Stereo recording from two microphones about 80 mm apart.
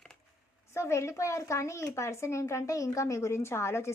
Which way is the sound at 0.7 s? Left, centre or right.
Left.